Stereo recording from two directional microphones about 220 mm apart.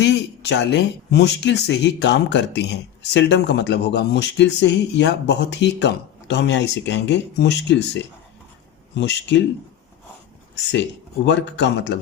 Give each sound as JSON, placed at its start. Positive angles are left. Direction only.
{"t": 0.0, "sound": "speech", "side_deg": 50}
{"t": 11.3, "sound": "speech", "side_deg": 55}